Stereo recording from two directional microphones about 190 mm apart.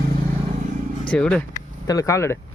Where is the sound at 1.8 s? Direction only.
15° left (ahead or behind).